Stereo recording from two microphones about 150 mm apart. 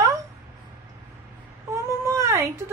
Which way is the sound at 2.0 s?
20° right (ahead or behind).